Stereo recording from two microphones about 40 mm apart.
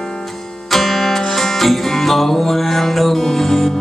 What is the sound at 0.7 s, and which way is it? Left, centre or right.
Music, centre.